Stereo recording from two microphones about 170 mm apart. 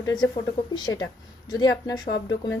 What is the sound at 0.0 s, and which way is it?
A woman's voice, 25° left (ahead or behind).